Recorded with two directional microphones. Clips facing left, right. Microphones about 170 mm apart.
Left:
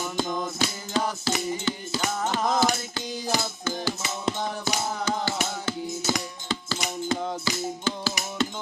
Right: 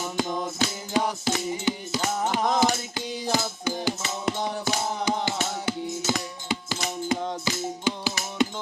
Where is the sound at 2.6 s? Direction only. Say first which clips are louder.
Right 1 dB; 15° right (ahead or behind).